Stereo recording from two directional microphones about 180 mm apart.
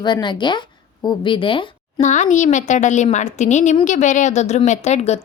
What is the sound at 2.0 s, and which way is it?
A woman's voice, 40° left (ahead or behind).